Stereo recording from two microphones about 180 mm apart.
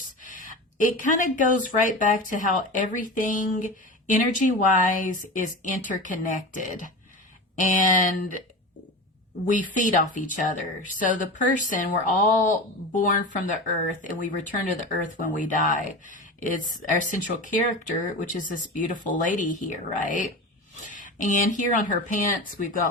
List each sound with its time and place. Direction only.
0.2 s a sound: 45° left (ahead or behind)
0.8 s speech: 45° left (ahead or behind)
9.7 s speech: 45° left (ahead or behind)